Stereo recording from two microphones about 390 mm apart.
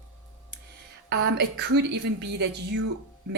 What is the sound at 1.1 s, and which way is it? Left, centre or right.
Speech, right.